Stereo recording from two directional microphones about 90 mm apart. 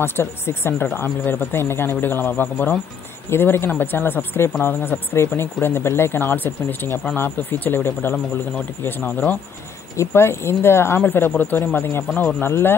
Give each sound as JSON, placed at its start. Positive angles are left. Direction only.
{"t": 0.0, "sound": "speech", "side_deg": 25}
{"t": 9.9, "sound": "speech", "side_deg": 30}